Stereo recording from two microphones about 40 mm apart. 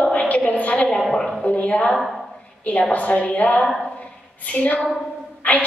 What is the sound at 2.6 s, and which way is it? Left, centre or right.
A woman's voice, left.